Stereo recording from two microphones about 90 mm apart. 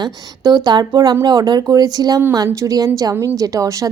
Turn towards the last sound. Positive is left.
turn(degrees=-40)  # may be behind; listen again after turning